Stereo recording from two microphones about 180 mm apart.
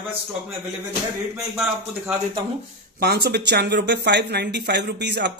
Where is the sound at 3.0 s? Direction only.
60° right (ahead or behind).